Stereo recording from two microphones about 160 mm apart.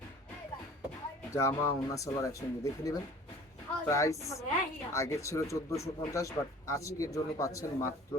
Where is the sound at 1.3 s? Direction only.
15° left (ahead or behind).